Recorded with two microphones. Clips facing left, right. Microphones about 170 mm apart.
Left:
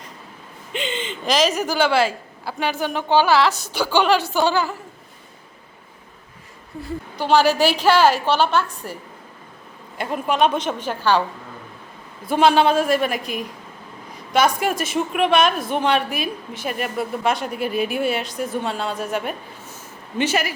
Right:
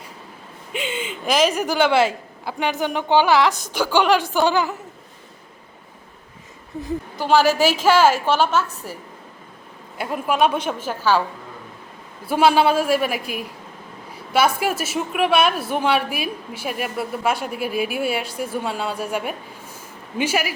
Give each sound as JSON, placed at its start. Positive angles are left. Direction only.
{"t": 0.7, "sound": "a woman's voice", "side_deg": -10}
{"t": 7.2, "sound": "a woman's voice", "side_deg": -5}
{"t": 12.2, "sound": "a woman's voice", "side_deg": -10}